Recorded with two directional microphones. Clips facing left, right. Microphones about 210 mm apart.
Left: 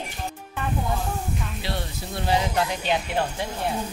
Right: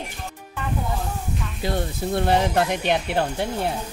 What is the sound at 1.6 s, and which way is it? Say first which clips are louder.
Speech: right 5 dB; 50° right (ahead or behind).